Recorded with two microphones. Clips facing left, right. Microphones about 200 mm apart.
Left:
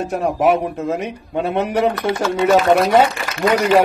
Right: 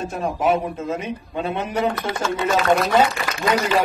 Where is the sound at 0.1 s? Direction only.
70° left (ahead or behind).